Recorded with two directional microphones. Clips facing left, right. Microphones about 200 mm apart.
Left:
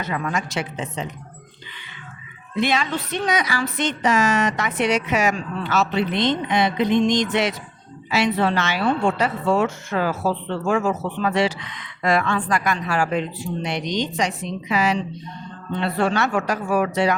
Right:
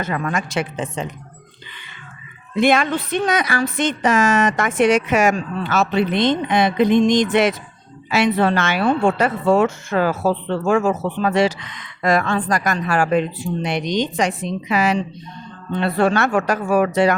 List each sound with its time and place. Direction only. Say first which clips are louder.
0.0 s a woman's voice: right 3 dB; 50° right (ahead or behind)
2.6 s a woman's voice: right 5 dB; 50° right (ahead or behind)